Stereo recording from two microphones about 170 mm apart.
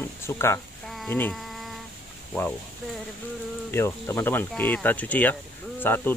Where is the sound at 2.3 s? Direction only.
5° left (ahead or behind).